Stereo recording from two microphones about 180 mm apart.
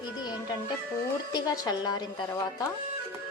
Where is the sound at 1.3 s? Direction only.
20° left (ahead or behind).